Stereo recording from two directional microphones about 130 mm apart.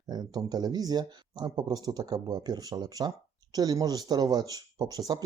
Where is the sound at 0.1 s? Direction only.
30° right (ahead or behind).